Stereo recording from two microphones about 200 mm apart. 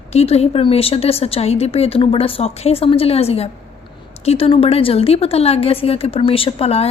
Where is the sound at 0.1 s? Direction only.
30° left (ahead or behind).